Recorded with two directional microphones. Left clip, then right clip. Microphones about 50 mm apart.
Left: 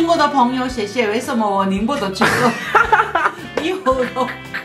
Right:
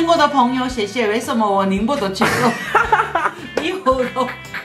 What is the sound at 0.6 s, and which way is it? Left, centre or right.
Speech, left.